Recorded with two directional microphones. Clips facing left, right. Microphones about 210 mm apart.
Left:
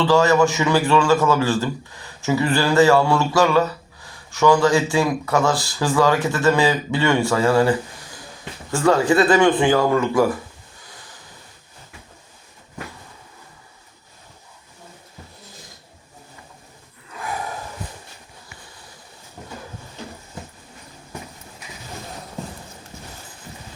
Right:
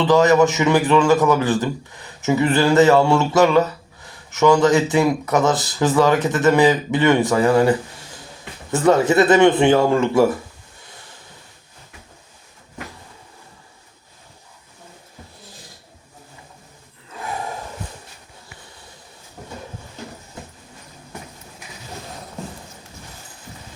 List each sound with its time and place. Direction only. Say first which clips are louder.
0.0 s a man's voice: right 2 dB; 20° right (ahead or behind)